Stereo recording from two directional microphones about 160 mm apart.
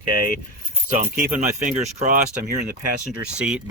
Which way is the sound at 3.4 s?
5° right (ahead or behind).